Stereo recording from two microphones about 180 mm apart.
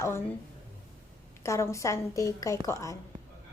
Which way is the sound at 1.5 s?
15° left (ahead or behind).